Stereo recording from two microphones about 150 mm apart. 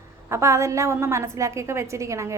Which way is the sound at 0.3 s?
20° right (ahead or behind).